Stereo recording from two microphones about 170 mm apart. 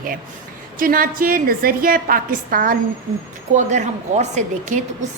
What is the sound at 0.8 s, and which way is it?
A woman's voice, 55° right (ahead or behind).